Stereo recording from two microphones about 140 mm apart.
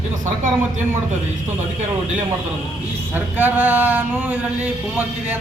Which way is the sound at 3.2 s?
10° right (ahead or behind).